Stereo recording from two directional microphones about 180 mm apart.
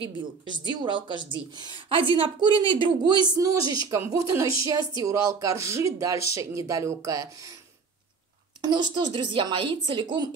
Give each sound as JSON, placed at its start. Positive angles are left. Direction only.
{"t": 0.0, "sound": "speech", "side_deg": -25}
{"t": 8.5, "sound": "speech", "side_deg": -25}